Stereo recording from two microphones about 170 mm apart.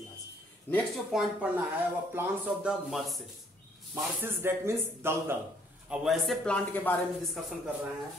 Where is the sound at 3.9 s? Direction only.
15° right (ahead or behind).